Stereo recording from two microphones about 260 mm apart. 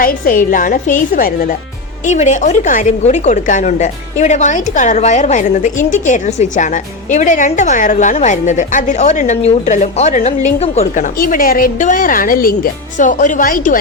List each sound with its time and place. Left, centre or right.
0.0 s a woman's voice: left